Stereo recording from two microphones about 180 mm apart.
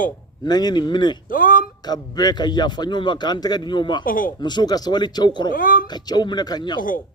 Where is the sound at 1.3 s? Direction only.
50° left (ahead or behind).